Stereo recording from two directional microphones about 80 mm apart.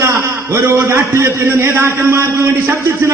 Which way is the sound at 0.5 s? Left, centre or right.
Right.